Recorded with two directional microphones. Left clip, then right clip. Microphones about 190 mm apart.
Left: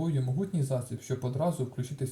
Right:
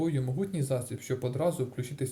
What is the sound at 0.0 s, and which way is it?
Speech, 25° right (ahead or behind).